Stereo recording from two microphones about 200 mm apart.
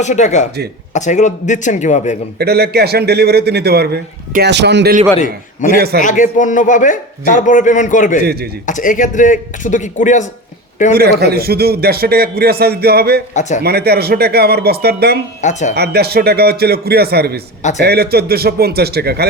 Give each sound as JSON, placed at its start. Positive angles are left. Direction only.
{"t": 0.0, "sound": "a man's voice", "side_deg": 35}
{"t": 2.4, "sound": "a man's voice", "side_deg": -55}
{"t": 5.6, "sound": "a man's voice", "side_deg": 40}
{"t": 8.2, "sound": "a man's voice", "side_deg": -50}
{"t": 8.6, "sound": "a man's voice", "side_deg": 40}
{"t": 10.9, "sound": "a man's voice", "side_deg": -55}
{"t": 13.3, "sound": "a man's voice", "side_deg": 35}
{"t": 13.6, "sound": "a man's voice", "side_deg": -55}
{"t": 15.4, "sound": "a man's voice", "side_deg": 35}
{"t": 15.7, "sound": "a man's voice", "side_deg": -55}